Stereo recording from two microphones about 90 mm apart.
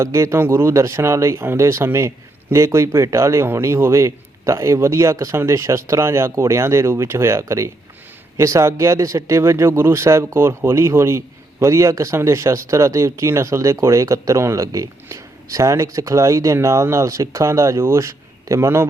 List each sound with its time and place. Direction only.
0.0 s speech: 30° right (ahead or behind)